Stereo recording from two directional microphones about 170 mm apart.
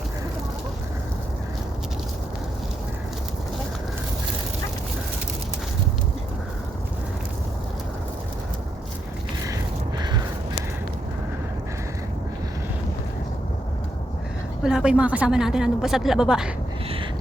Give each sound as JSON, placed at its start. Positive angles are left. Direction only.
{"t": 10.0, "sound": "crow", "side_deg": -25}
{"t": 14.6, "sound": "a woman's voice", "side_deg": -5}